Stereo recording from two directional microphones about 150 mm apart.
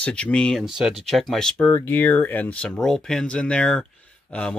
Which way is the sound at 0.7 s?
5° right (ahead or behind).